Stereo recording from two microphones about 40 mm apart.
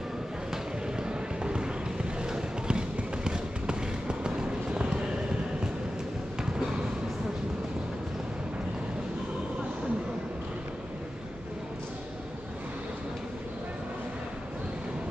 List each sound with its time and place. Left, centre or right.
0.5 s basketball bounce: centre
2.2 s a sound: centre
3.3 s basketball bounce: right